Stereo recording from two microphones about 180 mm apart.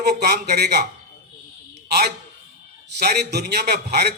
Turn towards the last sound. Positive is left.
turn(degrees=-60)  # may be behind; listen again after turning